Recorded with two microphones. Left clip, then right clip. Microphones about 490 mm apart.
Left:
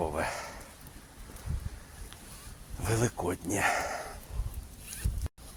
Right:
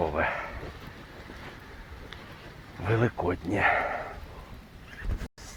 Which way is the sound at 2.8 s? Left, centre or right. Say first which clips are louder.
Right 4 dB; left.